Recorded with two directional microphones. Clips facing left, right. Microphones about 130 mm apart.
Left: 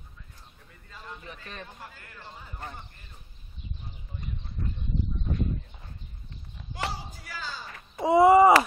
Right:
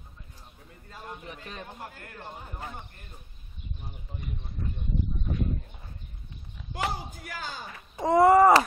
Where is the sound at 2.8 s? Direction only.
55° right (ahead or behind).